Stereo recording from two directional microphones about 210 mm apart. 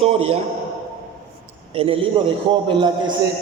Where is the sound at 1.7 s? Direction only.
25° right (ahead or behind).